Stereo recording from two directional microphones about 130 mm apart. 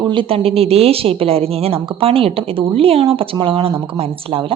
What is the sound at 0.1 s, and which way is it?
A woman's voice, 45° right (ahead or behind).